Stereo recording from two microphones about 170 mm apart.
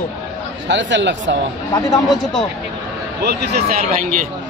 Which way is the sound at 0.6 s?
90° right.